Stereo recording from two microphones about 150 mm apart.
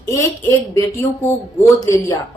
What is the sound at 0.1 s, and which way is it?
A woman's voice, 20° left (ahead or behind).